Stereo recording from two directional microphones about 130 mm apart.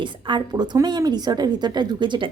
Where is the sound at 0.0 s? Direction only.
35° right (ahead or behind).